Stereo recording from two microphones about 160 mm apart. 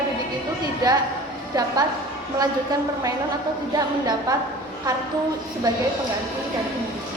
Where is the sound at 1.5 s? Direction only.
20° right (ahead or behind).